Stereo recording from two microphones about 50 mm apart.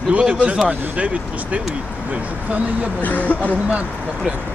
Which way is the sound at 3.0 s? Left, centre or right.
Left.